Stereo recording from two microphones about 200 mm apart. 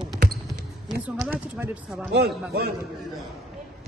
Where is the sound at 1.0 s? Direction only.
10° right (ahead or behind).